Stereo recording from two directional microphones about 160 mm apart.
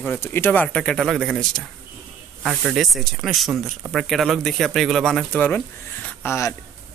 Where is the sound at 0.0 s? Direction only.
15° left (ahead or behind).